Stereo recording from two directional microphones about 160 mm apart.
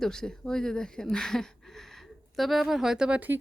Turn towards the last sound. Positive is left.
turn(degrees=-10)  # may be behind; listen again after turning